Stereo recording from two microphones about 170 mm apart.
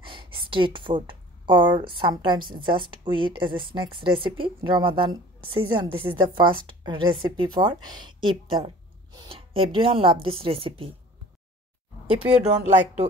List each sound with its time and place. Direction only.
0.0 s a woman's voice: 30° right (ahead or behind)
12.2 s speech: 5° right (ahead or behind)